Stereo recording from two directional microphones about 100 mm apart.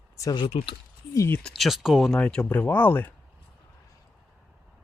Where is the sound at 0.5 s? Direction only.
55° left (ahead or behind).